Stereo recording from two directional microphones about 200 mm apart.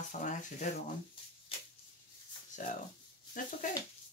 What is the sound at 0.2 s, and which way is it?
Speech, 40° left (ahead or behind).